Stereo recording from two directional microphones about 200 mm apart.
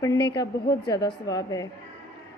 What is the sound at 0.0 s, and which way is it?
A woman's voice, 15° left (ahead or behind).